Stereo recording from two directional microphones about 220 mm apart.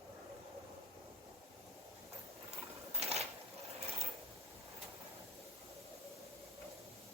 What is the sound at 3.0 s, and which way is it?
Sewing machine, 30° right (ahead or behind).